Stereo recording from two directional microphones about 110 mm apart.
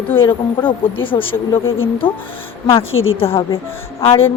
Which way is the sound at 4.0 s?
60° left (ahead or behind).